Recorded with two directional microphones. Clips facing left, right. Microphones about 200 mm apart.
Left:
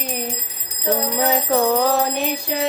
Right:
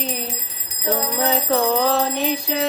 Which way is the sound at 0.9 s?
10° left (ahead or behind).